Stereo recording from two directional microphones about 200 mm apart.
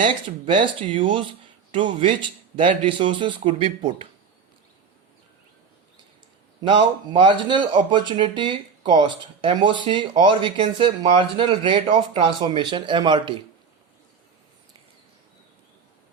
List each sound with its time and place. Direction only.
0.0 s speech: 25° right (ahead or behind)
6.6 s speech: 25° right (ahead or behind)